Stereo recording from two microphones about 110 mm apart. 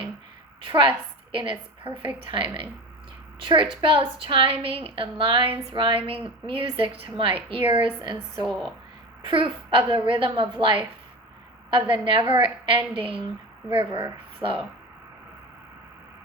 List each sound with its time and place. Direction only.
0.6 s a woman's voice: 50° right (ahead or behind)
8.4 s a woman's voice: centre (ahead or behind)
9.2 s a woman's voice: 50° right (ahead or behind)